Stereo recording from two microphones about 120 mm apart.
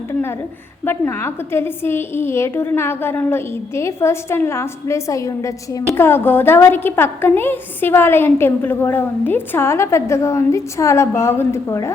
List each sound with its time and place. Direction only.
0.1 s a woman's voice: 20° left (ahead or behind)